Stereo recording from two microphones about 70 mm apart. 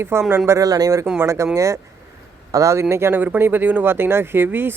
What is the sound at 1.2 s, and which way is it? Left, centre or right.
Speech, right.